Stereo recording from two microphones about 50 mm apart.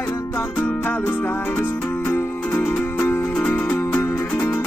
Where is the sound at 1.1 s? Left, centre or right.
Left.